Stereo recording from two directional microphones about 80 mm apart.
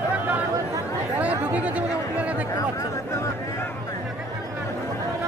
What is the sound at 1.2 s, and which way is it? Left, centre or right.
Chatter, centre.